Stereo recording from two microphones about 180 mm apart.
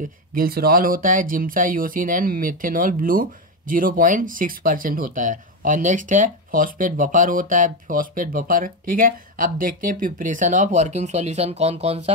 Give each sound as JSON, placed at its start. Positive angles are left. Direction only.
{"t": 0.3, "sound": "speech", "side_deg": -55}